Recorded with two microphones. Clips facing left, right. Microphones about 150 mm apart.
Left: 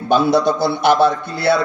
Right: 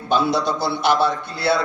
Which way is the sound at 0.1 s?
50° left (ahead or behind).